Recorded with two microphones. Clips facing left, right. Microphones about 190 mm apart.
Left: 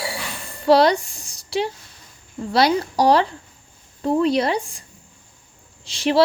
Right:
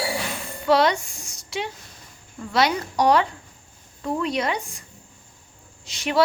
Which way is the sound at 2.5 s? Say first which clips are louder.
Left 4 dB; 35° left (ahead or behind).